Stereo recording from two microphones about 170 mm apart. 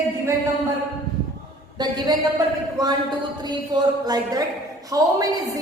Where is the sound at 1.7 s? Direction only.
25° right (ahead or behind).